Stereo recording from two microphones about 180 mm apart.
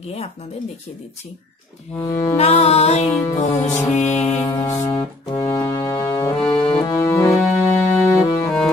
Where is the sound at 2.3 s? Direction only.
35° left (ahead or behind).